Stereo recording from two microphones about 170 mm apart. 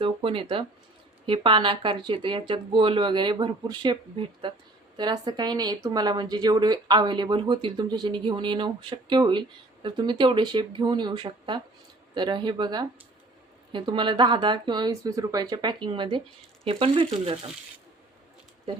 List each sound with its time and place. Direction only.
0.0 s a woman's voice: 30° right (ahead or behind)
4.9 s a woman's voice: 25° right (ahead or behind)